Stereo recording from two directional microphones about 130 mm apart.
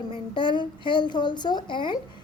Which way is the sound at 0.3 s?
35° left (ahead or behind).